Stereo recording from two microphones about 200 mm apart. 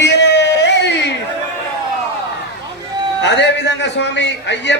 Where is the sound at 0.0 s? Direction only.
60° left (ahead or behind).